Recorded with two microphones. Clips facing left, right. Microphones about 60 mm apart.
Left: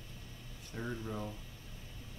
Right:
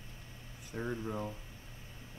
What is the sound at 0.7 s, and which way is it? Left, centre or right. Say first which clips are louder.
Speech: right 3 dB; right.